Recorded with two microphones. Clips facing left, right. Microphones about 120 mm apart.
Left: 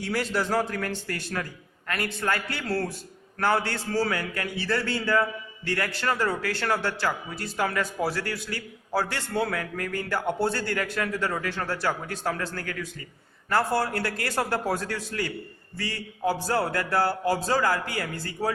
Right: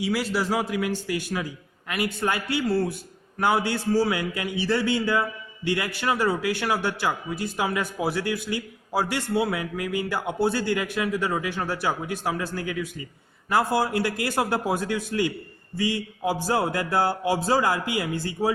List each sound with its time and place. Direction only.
0.0 s a man's voice: 5° right (ahead or behind)
8.2 s a man's voice: 20° right (ahead or behind)
16.5 s speech: 20° right (ahead or behind)